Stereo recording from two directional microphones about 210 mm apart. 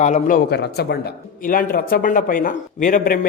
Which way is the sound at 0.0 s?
35° left (ahead or behind).